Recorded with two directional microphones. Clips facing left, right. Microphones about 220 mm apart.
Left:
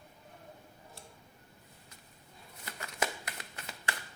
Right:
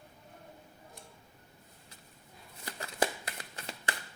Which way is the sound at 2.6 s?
35° right (ahead or behind).